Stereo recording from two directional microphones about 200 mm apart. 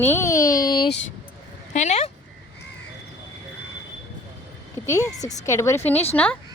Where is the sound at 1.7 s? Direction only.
35° left (ahead or behind).